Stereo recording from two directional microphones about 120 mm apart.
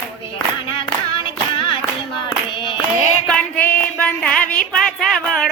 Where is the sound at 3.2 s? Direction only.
10° left (ahead or behind).